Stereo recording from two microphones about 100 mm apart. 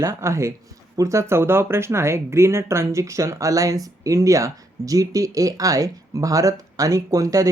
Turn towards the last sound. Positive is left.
turn(degrees=-35)  # may be behind; listen again after turning